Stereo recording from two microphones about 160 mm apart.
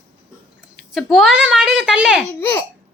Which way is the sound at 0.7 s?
Centre (ahead or behind).